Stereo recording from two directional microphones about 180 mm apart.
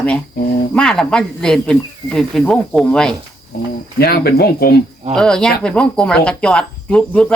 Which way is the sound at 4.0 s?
60° left (ahead or behind).